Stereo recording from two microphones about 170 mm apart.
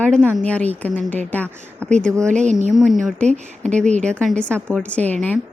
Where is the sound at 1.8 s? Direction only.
5° left (ahead or behind).